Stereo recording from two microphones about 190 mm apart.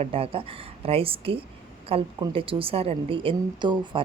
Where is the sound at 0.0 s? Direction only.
30° right (ahead or behind).